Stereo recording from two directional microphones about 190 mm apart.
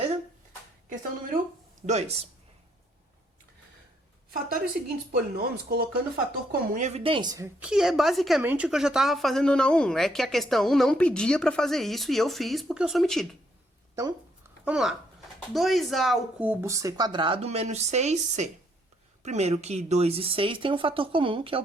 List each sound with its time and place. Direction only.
1.9 s speech: 35° right (ahead or behind)
4.8 s speech: 50° right (ahead or behind)
6.8 s a woman's voice: 30° right (ahead or behind); by 13.2 s centre (ahead or behind)
14.6 s speech: 5° right (ahead or behind); by 21.6 s 30° right (ahead or behind)